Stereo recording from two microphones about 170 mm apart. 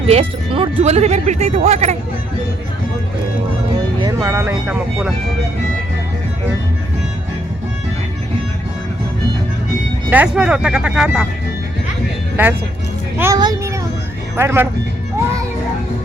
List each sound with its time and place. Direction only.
0.1 s speech: 35° right (ahead or behind)
4.0 s speech: 15° right (ahead or behind)
10.1 s speech: 10° right (ahead or behind)
13.1 s speech: 15° right (ahead or behind)